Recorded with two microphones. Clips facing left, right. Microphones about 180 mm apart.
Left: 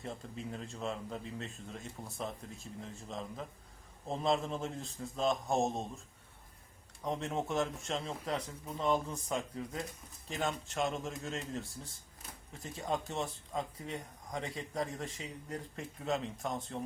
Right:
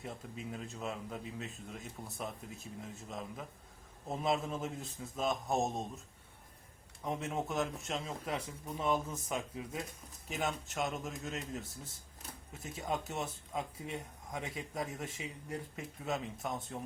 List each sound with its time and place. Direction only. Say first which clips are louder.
0.0 s a man's voice: left 2 dB; centre (ahead or behind)
7.0 s a man's voice: left 1 dB; 5° right (ahead or behind)